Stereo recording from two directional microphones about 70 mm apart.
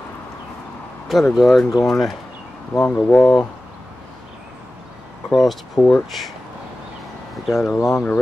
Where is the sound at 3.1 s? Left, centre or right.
Centre.